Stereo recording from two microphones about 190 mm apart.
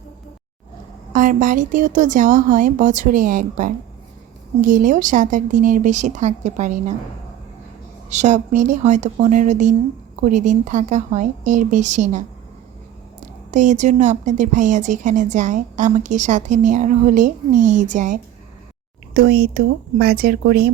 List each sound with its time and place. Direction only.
1.1 s speech: 45° right (ahead or behind)
8.1 s speech: 40° right (ahead or behind)
13.5 s speech: 40° right (ahead or behind)
19.1 s speech: 55° right (ahead or behind)